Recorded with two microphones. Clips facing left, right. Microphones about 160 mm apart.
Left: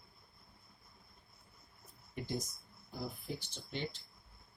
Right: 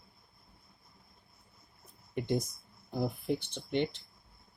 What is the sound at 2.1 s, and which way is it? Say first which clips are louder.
Speech: right 8 dB; 65° right (ahead or behind).